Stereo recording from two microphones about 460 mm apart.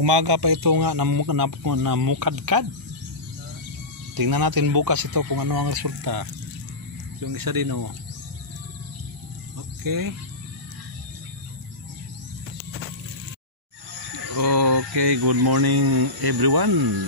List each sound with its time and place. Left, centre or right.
0.0 s speech: right
4.2 s speech: right
7.2 s speech: right
9.8 s speech: right
14.3 s speech: right